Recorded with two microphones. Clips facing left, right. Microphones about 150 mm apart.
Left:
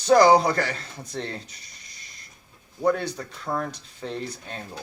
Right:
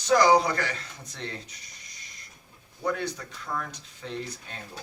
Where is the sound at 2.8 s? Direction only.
40° left (ahead or behind).